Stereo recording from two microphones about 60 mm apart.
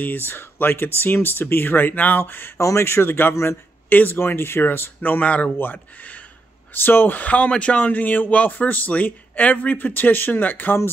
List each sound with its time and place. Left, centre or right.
0.3 s speech: left
2.6 s speech: left
5.2 s speech: left